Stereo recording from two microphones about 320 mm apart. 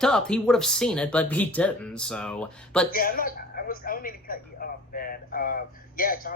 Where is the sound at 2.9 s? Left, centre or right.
Left.